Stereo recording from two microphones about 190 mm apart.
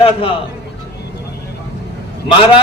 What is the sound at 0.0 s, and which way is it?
Speech, 30° left (ahead or behind).